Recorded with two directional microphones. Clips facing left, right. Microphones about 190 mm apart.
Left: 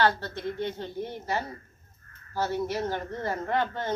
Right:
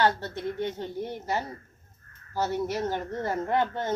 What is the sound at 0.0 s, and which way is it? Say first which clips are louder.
Speech: even; 15° right (ahead or behind).